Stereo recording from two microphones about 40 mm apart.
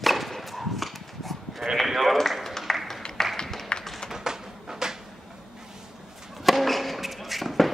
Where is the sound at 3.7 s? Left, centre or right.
Left.